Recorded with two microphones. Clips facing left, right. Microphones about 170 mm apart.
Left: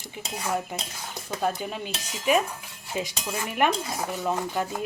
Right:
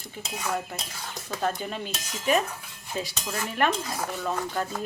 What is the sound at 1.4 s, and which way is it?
Speech, 5° left (ahead or behind).